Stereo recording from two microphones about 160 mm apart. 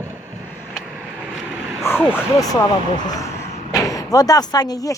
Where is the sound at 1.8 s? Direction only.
15° left (ahead or behind).